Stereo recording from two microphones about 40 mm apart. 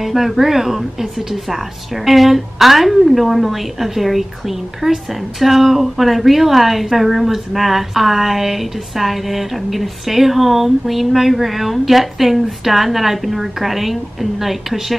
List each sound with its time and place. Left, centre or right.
0.0 s speech: centre
2.0 s a woman's voice: centre
4.8 s a woman's voice: right
5.4 s a woman's voice: centre